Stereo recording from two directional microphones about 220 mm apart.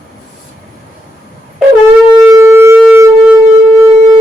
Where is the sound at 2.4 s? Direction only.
10° right (ahead or behind).